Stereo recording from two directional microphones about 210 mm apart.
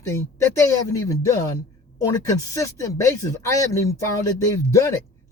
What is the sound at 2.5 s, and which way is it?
Speech, 15° left (ahead or behind).